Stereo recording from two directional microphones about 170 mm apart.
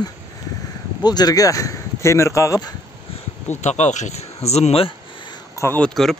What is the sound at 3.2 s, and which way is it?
Speech, 40° left (ahead or behind).